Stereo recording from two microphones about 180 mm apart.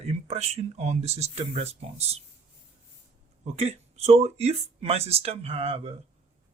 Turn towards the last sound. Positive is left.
turn(degrees=-35)  # may be behind; listen again after turning